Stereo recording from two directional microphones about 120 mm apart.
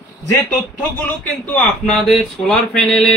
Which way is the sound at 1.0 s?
10° left (ahead or behind).